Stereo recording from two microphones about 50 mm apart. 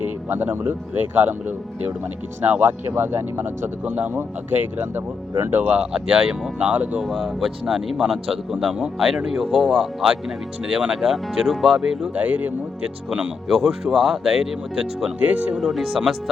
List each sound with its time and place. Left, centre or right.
0.0 s speech: right
5.8 s speech: centre
6.6 s speech: right
7.3 s speech: centre
12.1 s speech: right
13.1 s speech: centre
15.2 s speech: right
15.5 s speech: centre